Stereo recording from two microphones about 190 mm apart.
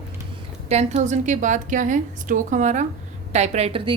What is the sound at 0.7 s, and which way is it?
A woman's voice, 35° right (ahead or behind).